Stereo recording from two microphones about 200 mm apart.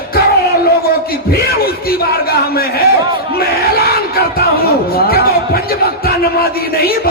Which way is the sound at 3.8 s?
50° left (ahead or behind).